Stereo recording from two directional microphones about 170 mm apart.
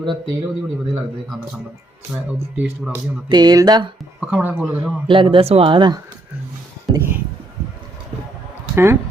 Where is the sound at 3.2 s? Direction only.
25° right (ahead or behind).